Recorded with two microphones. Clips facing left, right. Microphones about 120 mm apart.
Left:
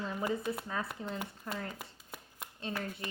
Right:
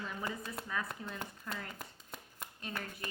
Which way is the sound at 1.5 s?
30° left (ahead or behind).